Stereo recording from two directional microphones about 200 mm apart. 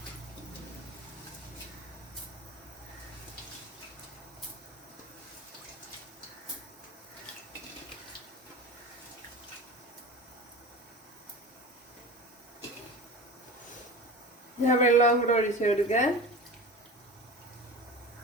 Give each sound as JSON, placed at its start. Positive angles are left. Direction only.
{"t": 14.6, "sound": "a woman's voice", "side_deg": 35}